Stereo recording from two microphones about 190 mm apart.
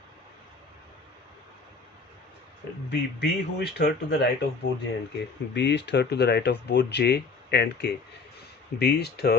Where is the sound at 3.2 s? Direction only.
60° left (ahead or behind).